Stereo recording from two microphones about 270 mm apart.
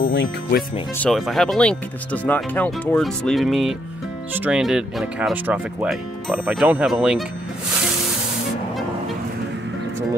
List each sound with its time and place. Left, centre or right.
0.0 s speech: left
0.9 s speech: centre